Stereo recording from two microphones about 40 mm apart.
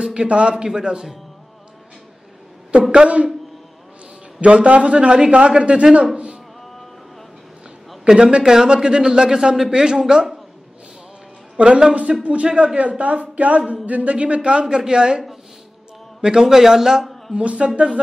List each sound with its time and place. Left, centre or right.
0.0 s a man's voice: right
2.9 s a man's voice: right
4.4 s a man's voice: right
6.1 s a sound: right
8.1 s a man's voice: right
11.5 s a man's voice: right
17.4 s a man's voice: right